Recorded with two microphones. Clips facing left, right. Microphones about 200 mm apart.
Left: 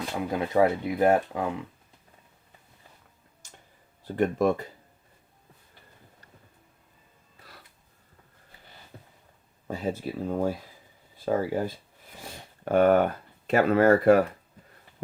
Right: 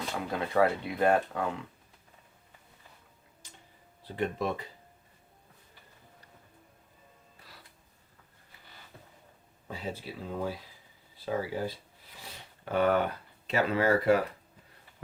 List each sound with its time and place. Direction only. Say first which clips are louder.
0.3 s speech: left 4 dB; 20° left (ahead or behind)
4.0 s speech: left 8 dB; 45° left (ahead or behind)
9.6 s speech: left 8 dB; 45° left (ahead or behind)
12.2 s a sound: left 7 dB; 50° left (ahead or behind)
13.5 s speech: left 7 dB; 50° left (ahead or behind)